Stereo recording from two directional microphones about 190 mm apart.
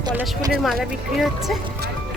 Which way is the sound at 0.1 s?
5° right (ahead or behind).